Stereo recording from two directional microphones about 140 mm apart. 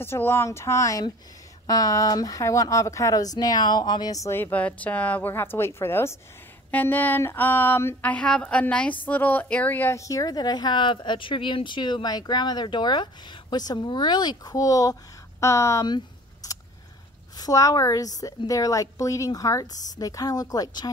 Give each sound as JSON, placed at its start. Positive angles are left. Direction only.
{"t": 0.0, "sound": "speech", "side_deg": 15}
{"t": 16.4, "sound": "a sound", "side_deg": 25}
{"t": 17.4, "sound": "speech", "side_deg": 25}